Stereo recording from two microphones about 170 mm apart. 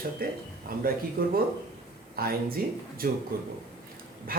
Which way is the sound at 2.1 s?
60° right (ahead or behind).